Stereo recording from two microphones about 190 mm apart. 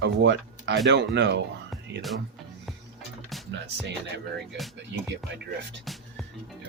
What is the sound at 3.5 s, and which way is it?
Speech, 65° right (ahead or behind).